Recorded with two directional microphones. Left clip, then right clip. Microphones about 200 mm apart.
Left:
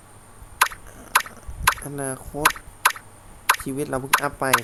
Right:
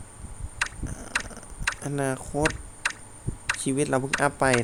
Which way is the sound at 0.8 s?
15° right (ahead or behind).